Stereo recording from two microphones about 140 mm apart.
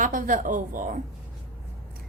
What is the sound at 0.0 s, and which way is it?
Speech, 70° right (ahead or behind).